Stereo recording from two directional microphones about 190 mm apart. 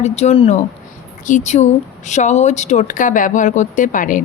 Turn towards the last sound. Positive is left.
turn(degrees=45)  # may be behind; listen again after turning